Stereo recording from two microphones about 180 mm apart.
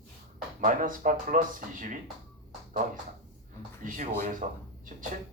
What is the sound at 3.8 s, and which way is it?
Speech, 50° right (ahead or behind).